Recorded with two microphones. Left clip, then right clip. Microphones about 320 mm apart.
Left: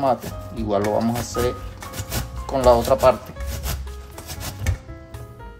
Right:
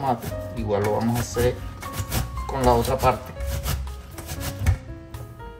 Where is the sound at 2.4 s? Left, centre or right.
Left.